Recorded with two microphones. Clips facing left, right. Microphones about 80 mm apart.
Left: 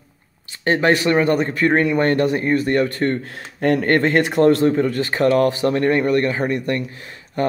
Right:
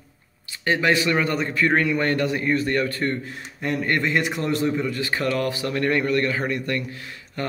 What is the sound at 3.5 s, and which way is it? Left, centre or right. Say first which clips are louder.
Speech: left 7 dB; left.